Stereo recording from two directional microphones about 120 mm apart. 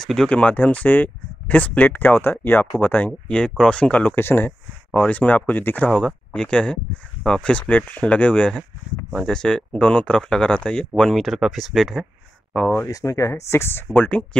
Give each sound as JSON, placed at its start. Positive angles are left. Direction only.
{"t": 0.0, "sound": "speech", "side_deg": 5}
{"t": 5.9, "sound": "speech", "side_deg": 5}
{"t": 12.8, "sound": "speech", "side_deg": 25}